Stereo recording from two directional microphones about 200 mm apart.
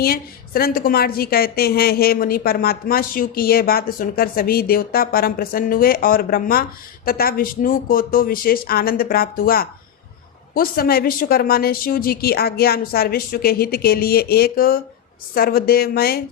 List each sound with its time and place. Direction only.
0.0 s a woman's voice: 50° left (ahead or behind)